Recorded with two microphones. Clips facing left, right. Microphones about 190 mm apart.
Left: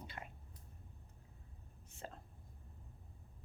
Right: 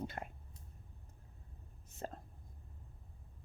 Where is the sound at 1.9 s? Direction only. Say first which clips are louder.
Right 6 dB; 40° right (ahead or behind).